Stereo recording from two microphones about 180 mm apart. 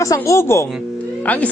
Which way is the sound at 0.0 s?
15° left (ahead or behind).